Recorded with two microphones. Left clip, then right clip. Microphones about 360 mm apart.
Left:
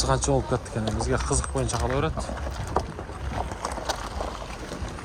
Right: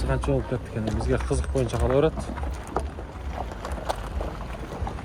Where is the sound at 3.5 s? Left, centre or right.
Left.